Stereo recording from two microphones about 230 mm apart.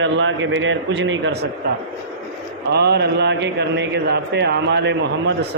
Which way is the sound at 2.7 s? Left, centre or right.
Right.